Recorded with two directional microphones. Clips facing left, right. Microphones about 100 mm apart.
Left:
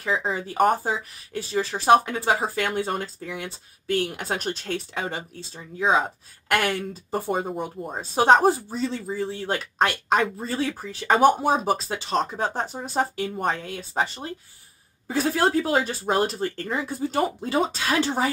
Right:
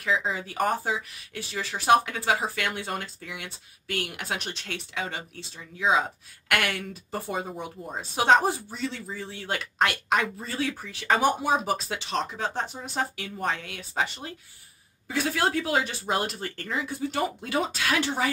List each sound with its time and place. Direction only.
0.0 s speech: 35° left (ahead or behind)